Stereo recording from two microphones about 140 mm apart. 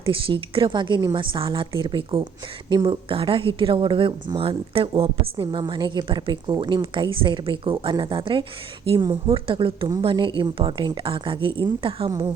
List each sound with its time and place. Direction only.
0.0 s a woman's voice: 40° right (ahead or behind)